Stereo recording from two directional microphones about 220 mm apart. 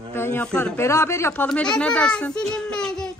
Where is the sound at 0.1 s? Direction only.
10° left (ahead or behind).